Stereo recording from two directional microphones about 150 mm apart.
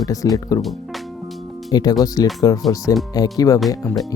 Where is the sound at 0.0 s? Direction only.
20° left (ahead or behind).